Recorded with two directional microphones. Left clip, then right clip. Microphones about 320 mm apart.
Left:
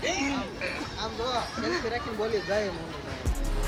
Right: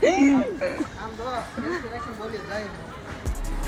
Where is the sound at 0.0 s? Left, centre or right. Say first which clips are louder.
Right 10 dB; centre.